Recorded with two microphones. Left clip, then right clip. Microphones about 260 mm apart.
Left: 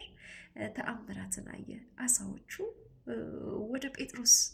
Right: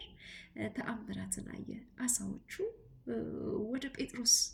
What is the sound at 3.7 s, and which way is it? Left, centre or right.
Speech, centre.